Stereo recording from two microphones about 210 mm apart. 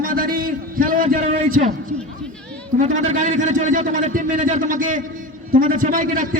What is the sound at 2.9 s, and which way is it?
A man's voice, 35° right (ahead or behind).